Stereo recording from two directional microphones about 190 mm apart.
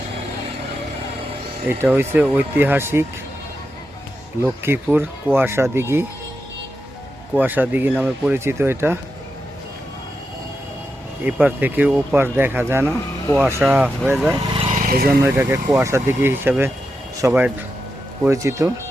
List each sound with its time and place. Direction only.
1.6 s speech: 10° right (ahead or behind)
4.4 s speech: 10° right (ahead or behind)
7.3 s speech: 10° right (ahead or behind)
11.3 s speech: 10° right (ahead or behind)
14.5 s vehicle: 30° right (ahead or behind)
14.8 s vehicle: 50° right (ahead or behind)
15.2 s speech: 15° right (ahead or behind)